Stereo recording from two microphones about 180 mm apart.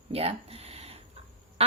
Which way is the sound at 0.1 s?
35° right (ahead or behind).